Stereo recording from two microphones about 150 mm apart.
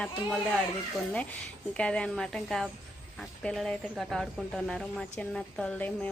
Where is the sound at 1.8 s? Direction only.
5° left (ahead or behind).